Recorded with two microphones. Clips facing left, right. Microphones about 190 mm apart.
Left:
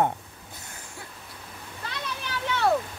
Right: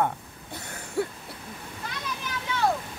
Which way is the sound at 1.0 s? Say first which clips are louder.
Right 19 dB; 70° right (ahead or behind).